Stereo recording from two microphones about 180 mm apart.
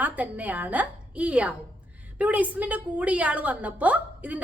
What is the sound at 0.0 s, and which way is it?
A woman's voice, 10° right (ahead or behind).